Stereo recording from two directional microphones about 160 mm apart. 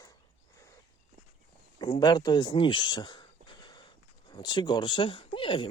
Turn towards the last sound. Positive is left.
turn(degrees=30)  # may be behind; listen again after turning